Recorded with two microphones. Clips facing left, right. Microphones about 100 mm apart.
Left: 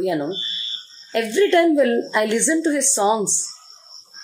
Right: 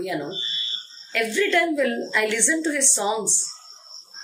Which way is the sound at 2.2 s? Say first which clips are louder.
Left 5 dB; 20° left (ahead or behind).